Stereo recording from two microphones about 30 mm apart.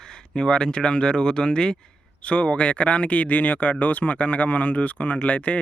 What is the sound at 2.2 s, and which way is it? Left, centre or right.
Speech, left.